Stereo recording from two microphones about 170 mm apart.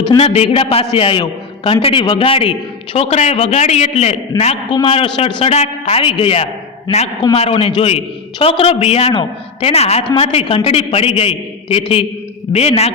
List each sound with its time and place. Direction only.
0.0 s a man's voice: 30° left (ahead or behind)